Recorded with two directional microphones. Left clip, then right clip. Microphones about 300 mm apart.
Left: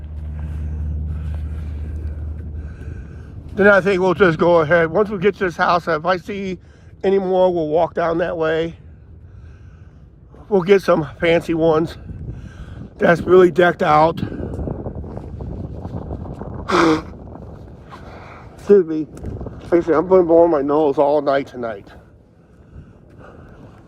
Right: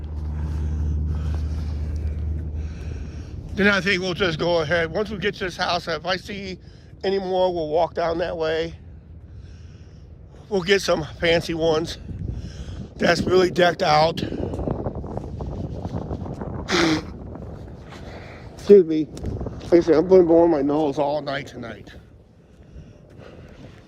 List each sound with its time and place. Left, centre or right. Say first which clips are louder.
0.3 s vehicle: right 1 dB; centre
2.6 s speech: even; centre; by 8.7 s left
10.5 s speech: left 6 dB; centre
16.6 s a sound: left 6 dB; centre
19.1 s a sound: even; centre
20.2 s speech: left 4 dB; centre
21.2 s speech: left 10 dB; centre